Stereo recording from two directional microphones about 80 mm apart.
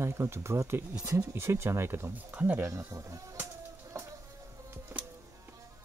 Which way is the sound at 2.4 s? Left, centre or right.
Right.